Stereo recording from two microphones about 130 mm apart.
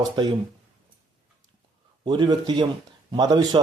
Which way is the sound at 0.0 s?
35° right (ahead or behind).